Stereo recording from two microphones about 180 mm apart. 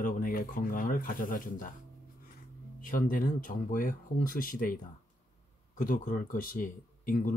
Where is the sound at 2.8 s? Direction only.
50° left (ahead or behind).